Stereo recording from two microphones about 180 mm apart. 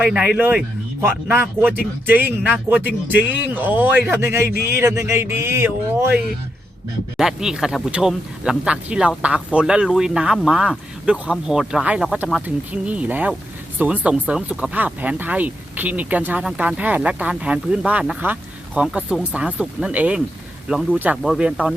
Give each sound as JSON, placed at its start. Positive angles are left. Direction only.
{"t": 0.0, "sound": "speech", "side_deg": -5}
{"t": 7.2, "sound": "speech", "side_deg": -5}